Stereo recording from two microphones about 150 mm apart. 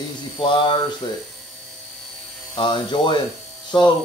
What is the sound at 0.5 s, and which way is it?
Speech, 35° left (ahead or behind).